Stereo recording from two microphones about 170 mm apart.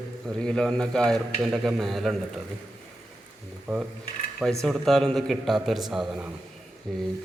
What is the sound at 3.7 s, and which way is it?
A man's voice, 5° right (ahead or behind).